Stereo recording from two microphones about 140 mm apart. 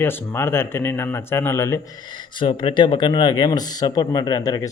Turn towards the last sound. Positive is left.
turn(degrees=25)  # may be behind; listen again after turning